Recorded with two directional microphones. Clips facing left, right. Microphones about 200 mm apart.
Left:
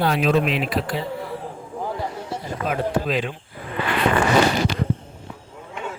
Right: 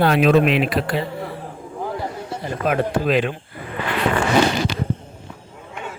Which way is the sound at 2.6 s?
65° right (ahead or behind).